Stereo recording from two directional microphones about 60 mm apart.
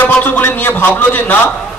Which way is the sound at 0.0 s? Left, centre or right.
Left.